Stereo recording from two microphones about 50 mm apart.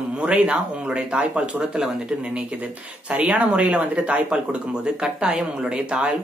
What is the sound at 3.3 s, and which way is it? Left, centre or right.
Speech, right.